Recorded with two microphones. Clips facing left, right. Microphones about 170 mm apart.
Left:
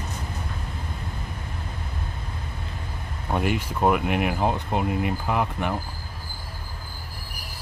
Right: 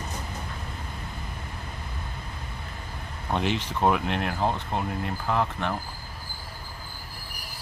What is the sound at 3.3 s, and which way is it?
Speech, 10° left (ahead or behind).